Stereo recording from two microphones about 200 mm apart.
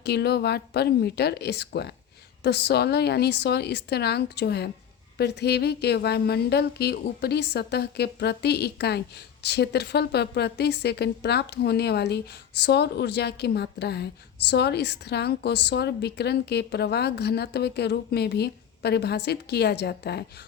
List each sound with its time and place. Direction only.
0.0 s a woman's voice: 55° left (ahead or behind)